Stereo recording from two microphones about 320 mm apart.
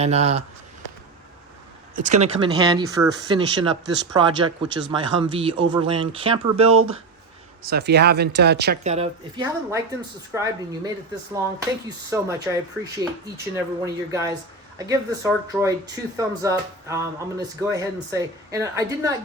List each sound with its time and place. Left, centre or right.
0.0 s speech: centre
2.0 s speech: right
6.7 s speech: right
7.6 s speech: right; by 10.9 s centre
12.1 s speech: centre